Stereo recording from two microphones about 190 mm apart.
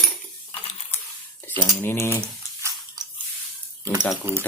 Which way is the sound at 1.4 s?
10° left (ahead or behind).